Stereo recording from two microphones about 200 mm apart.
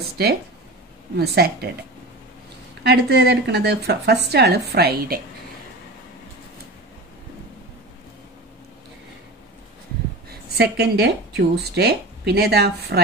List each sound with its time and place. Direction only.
0.2 s a woman's voice: 55° right (ahead or behind)
2.8 s speech: 55° right (ahead or behind)
10.6 s speech: 55° right (ahead or behind)